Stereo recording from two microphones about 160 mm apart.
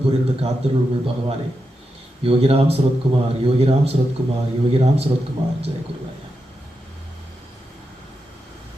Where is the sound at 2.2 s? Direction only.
35° right (ahead or behind).